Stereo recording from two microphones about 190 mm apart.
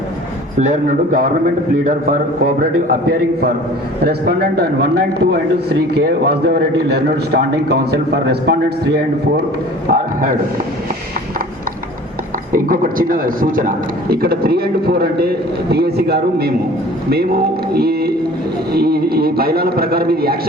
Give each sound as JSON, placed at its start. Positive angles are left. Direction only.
{"t": 0.6, "sound": "a man's voice", "side_deg": -45}
{"t": 12.5, "sound": "a man's voice", "side_deg": -45}